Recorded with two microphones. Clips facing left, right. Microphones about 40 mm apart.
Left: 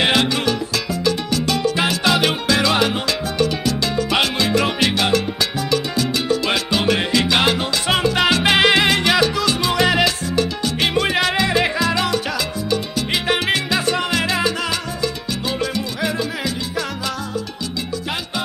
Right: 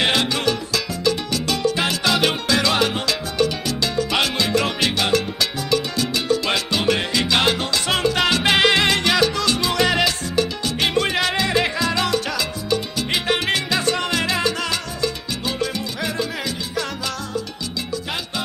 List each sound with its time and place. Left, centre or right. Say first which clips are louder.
0.0 s music: left 2 dB; centre
1.4 s salsa music: left 2 dB; centre
6.4 s salsa music: left 2 dB; centre
13.1 s salsa music: left 1 dB; centre